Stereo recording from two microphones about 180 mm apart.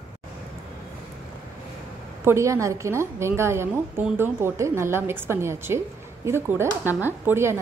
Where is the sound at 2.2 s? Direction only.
15° right (ahead or behind).